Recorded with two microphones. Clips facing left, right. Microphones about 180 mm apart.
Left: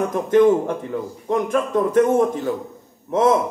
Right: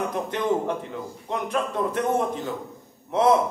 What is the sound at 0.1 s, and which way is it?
A man's voice, 45° left (ahead or behind).